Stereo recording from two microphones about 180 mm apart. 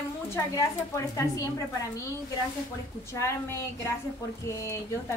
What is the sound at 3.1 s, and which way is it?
Speech, 15° left (ahead or behind).